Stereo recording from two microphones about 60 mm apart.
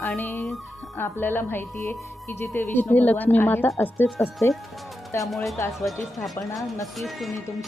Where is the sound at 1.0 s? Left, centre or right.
Left.